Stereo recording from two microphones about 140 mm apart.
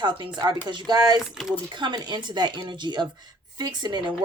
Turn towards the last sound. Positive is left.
turn(degrees=-30)  # may be behind; listen again after turning